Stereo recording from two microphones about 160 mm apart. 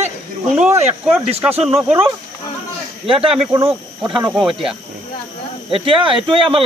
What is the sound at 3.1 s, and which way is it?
Speech, 35° right (ahead or behind).